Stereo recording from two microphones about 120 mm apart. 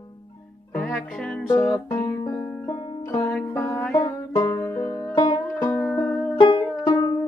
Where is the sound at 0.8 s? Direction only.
Centre (ahead or behind).